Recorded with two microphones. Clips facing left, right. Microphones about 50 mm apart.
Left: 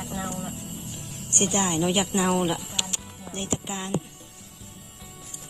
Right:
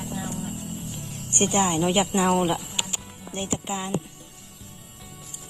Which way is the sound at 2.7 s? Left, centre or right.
Centre.